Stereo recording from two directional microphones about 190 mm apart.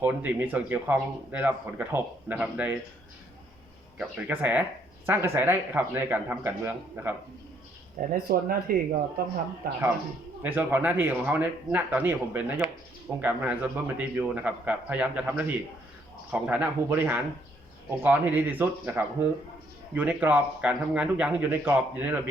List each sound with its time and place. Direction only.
0.0 s speech: 10° right (ahead or behind)
3.9 s speech: 10° right (ahead or behind)
8.1 s speech: 50° right (ahead or behind)
10.4 s speech: 10° right (ahead or behind)